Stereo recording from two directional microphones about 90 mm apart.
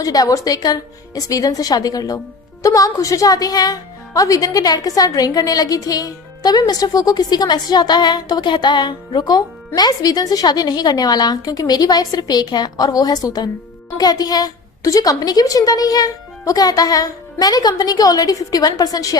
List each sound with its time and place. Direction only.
0.0 s speech: 45° left (ahead or behind)